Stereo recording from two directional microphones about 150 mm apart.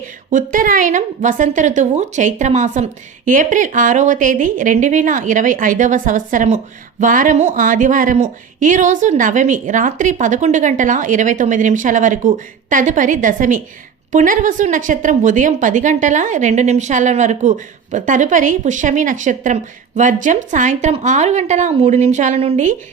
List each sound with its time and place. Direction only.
0.3 s a woman's voice: 60° right (ahead or behind)